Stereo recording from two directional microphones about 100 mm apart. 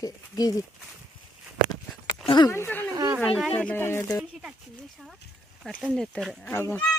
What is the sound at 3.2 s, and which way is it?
Speech, centre (ahead or behind).